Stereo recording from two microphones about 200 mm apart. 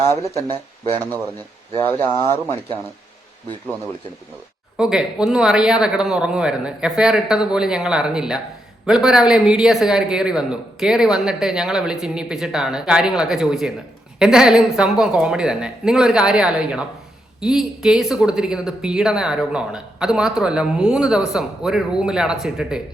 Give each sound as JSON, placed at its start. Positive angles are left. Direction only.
{"t": 0.4, "sound": "speech", "side_deg": -25}
{"t": 4.8, "sound": "speech", "side_deg": -5}